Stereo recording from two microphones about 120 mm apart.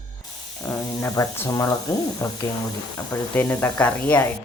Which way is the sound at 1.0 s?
20° left (ahead or behind).